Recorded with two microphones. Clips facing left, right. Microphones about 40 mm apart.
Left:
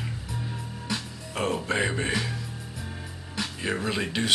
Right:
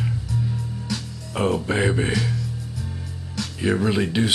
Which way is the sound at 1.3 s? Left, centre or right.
Centre.